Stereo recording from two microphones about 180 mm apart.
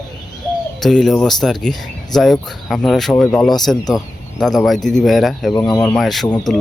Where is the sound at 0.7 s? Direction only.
Centre (ahead or behind).